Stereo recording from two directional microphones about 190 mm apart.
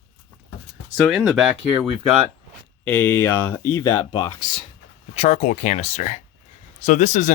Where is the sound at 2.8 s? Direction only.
10° left (ahead or behind).